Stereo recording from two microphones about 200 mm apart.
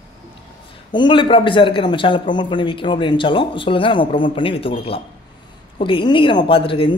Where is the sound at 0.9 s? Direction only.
25° left (ahead or behind).